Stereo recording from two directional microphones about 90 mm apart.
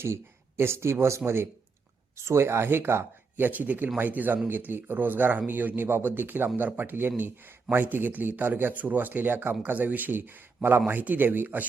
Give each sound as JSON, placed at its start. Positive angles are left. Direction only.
{"t": 0.0, "sound": "speech", "side_deg": -30}